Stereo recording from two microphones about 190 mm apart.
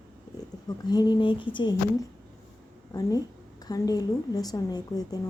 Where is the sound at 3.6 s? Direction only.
20° left (ahead or behind).